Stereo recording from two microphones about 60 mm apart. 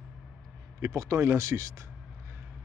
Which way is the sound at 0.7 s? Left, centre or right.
Right.